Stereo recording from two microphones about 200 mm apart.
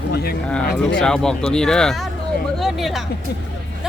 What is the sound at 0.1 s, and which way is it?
Speech, 50° left (ahead or behind).